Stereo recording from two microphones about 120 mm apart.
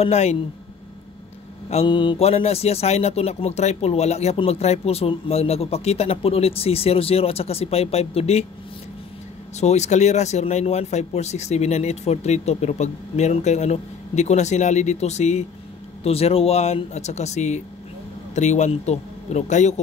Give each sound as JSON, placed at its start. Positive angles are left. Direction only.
{"t": 0.0, "sound": "a man's voice", "side_deg": 65}
{"t": 1.9, "sound": "speech", "side_deg": 40}
{"t": 2.2, "sound": "a man's voice", "side_deg": 60}
{"t": 9.6, "sound": "speech", "side_deg": 70}
{"t": 16.0, "sound": "a man's voice", "side_deg": 55}